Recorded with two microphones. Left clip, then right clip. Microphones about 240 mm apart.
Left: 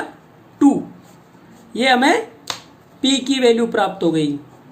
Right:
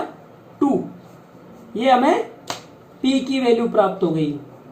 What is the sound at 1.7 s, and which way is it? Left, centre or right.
Speech, left.